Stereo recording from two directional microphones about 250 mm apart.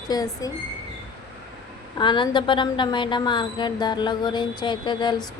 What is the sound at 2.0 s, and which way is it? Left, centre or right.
A woman's voice, centre.